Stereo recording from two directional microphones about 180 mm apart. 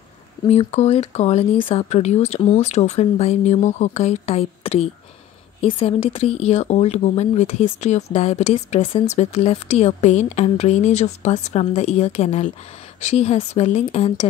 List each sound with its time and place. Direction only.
0.5 s speech: 35° left (ahead or behind)